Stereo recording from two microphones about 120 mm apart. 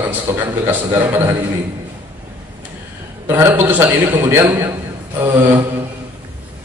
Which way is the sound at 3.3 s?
20° right (ahead or behind).